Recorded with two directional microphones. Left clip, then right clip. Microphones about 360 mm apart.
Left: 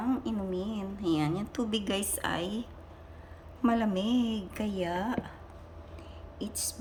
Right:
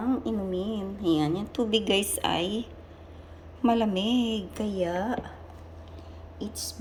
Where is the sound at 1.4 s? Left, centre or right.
Left.